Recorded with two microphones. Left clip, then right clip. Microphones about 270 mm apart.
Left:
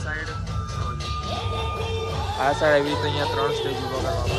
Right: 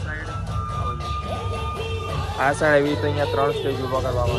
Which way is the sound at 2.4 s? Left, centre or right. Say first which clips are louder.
Right 1 dB; right.